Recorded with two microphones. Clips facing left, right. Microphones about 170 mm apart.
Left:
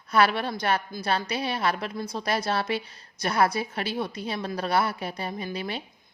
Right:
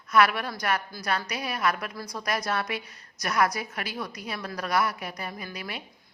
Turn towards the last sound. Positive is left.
turn(degrees=25)  # may be behind; listen again after turning